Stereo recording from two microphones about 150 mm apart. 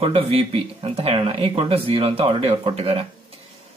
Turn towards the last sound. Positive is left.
turn(degrees=-40)  # may be behind; listen again after turning